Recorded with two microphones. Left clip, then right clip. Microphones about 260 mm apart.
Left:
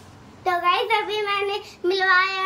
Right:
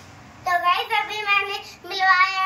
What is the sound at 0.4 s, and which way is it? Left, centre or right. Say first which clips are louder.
Child singing: even; left.